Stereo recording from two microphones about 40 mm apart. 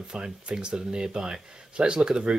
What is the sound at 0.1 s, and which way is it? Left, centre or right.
Speech, right.